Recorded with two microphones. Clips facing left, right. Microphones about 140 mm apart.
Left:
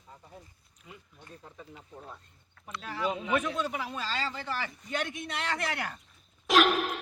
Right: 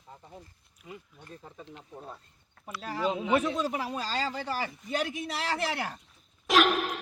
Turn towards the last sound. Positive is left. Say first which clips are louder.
# even
turn(degrees=0)  # may be behind; listen again after turning